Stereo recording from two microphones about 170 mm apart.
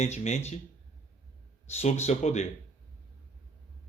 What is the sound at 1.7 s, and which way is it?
Speech, 40° left (ahead or behind).